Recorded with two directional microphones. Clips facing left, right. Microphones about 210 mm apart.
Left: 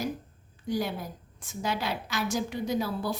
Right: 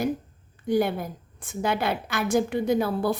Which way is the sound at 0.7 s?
55° right (ahead or behind).